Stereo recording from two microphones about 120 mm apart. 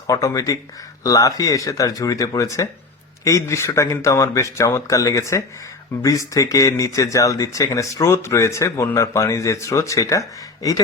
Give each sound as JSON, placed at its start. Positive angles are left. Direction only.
{"t": 0.1, "sound": "speech", "side_deg": 30}